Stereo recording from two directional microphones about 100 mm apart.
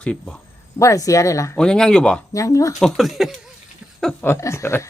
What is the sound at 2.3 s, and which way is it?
Speech, 35° left (ahead or behind).